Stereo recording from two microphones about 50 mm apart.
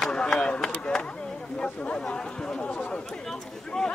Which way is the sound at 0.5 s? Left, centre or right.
Centre.